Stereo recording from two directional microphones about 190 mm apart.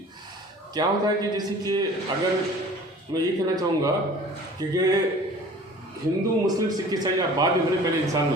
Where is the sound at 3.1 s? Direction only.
20° right (ahead or behind).